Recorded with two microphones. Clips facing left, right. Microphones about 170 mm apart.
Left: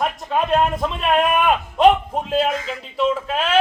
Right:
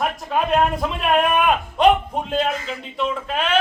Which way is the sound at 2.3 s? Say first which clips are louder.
Left 3 dB; 5° left (ahead or behind).